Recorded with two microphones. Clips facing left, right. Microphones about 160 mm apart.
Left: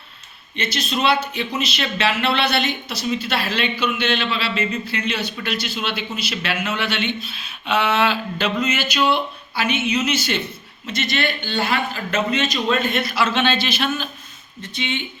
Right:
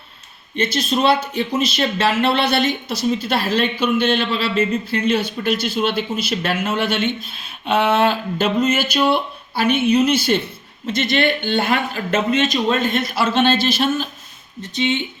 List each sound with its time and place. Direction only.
0.5 s speech: 50° right (ahead or behind)